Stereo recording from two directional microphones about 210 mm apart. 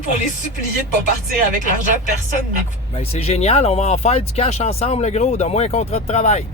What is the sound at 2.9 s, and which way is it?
Speech, 30° left (ahead or behind).